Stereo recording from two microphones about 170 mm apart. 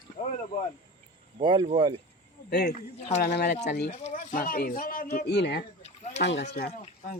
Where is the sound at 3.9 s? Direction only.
40° left (ahead or behind); by 5.6 s 75° left (ahead or behind).